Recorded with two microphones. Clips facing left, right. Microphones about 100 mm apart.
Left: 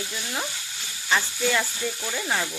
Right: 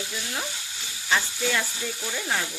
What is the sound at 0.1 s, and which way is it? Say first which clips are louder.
Speech: left 1 dB; 5° left (ahead or behind).